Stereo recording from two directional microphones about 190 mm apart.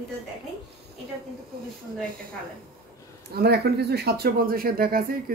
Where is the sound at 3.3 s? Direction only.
55° right (ahead or behind).